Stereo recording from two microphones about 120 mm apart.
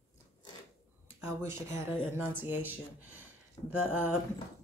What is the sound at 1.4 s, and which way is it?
Speech, 20° right (ahead or behind).